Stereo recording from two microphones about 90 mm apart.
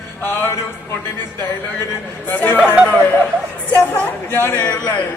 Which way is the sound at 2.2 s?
20° left (ahead or behind).